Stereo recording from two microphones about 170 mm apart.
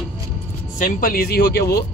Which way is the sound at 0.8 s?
55° left (ahead or behind).